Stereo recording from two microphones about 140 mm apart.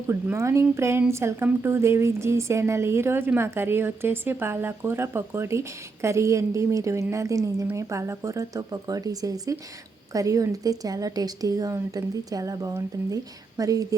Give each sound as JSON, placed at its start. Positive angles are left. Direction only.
{"t": 0.1, "sound": "a woman's voice", "side_deg": -20}